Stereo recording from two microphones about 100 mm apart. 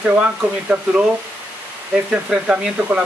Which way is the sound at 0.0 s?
10° right (ahead or behind).